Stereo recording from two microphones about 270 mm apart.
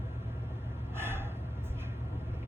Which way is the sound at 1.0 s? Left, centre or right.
Centre.